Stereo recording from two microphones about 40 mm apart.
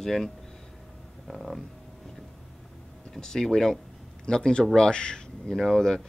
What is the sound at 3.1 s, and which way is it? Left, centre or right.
Speech, centre.